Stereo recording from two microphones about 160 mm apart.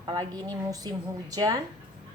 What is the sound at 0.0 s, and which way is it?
A woman's voice, 25° right (ahead or behind).